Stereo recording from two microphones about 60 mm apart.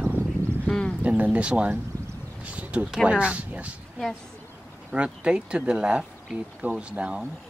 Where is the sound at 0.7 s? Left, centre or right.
Centre.